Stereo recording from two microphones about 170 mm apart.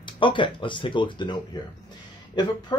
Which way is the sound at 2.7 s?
25° left (ahead or behind).